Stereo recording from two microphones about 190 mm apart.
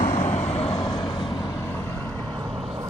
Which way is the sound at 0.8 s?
20° left (ahead or behind).